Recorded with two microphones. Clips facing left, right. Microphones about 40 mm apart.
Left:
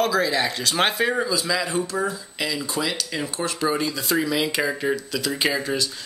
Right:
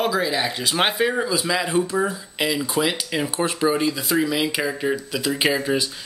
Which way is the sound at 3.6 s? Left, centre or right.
Centre.